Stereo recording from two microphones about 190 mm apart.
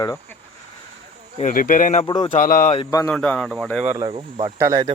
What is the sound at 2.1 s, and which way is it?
Speech, 25° left (ahead or behind).